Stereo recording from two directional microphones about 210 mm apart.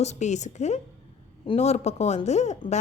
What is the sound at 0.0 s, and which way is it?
A woman's voice, 35° left (ahead or behind).